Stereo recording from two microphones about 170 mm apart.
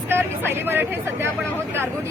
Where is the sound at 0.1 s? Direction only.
15° right (ahead or behind).